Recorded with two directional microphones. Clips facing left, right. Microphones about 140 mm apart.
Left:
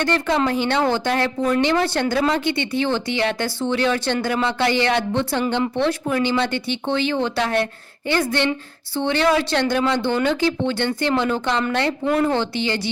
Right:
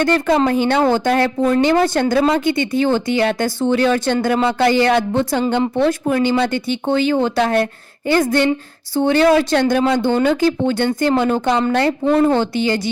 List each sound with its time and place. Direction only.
0.0 s speech: 45° right (ahead or behind)
12.0 s speech: 30° right (ahead or behind)
12.3 s speech: 45° right (ahead or behind)